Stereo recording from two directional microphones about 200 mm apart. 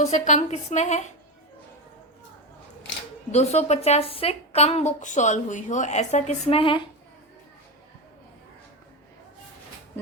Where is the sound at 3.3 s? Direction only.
35° left (ahead or behind).